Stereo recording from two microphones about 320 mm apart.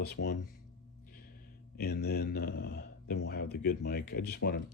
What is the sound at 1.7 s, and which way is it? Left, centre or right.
Speech, left.